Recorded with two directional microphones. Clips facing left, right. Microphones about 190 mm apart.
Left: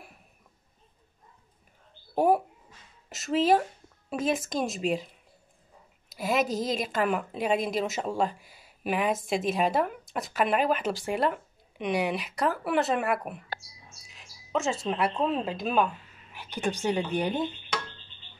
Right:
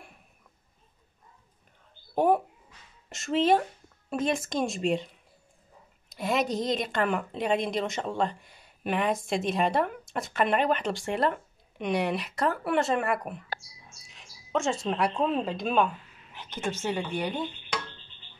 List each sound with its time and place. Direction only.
2.1 s a child's voice: 10° left (ahead or behind)